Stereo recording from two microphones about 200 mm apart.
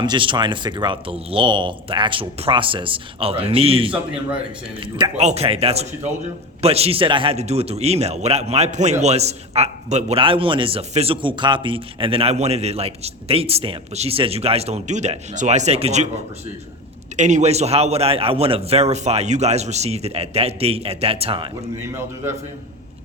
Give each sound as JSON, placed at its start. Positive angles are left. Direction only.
{"t": 0.0, "sound": "a man's voice", "side_deg": -25}
{"t": 17.2, "sound": "a man's voice", "side_deg": -35}
{"t": 21.9, "sound": "a man's voice", "side_deg": -10}